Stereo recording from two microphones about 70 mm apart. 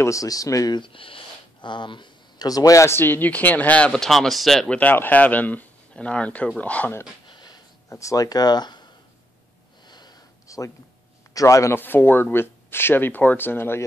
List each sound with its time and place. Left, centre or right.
0.0 s speech: left
1.6 s a man's voice: left
2.9 s speech: left
3.9 s speech: centre
4.6 s speech: left
7.3 s a sound: left
7.9 s speech: left
9.8 s sniff: left
10.4 s a sound: left
11.3 s speech: left
11.8 s speech: left